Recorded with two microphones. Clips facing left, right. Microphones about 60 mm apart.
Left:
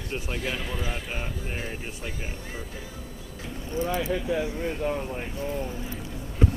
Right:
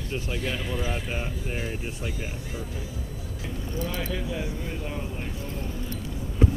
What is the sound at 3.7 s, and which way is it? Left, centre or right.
Speech, left.